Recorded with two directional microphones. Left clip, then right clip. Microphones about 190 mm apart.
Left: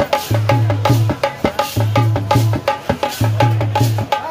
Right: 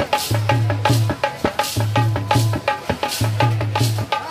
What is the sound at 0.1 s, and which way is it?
Music, 50° left (ahead or behind).